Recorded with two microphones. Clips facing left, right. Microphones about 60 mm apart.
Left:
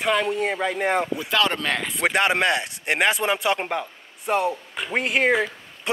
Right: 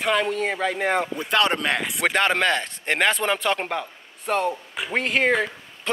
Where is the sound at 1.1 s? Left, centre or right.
Right.